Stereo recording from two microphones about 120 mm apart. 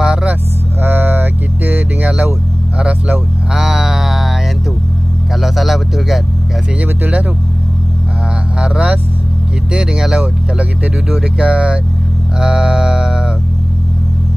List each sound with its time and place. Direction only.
0.0 s speech: 10° right (ahead or behind)
2.8 s a sound: 10° right (ahead or behind)
5.3 s speech: centre (ahead or behind)
6.8 s speech: 10° right (ahead or behind)
8.5 s speech: 10° right (ahead or behind)